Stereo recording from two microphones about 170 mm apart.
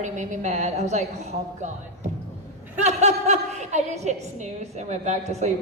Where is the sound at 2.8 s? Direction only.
40° right (ahead or behind).